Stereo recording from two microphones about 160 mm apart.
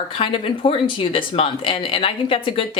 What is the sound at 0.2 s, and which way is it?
Speech, 35° left (ahead or behind).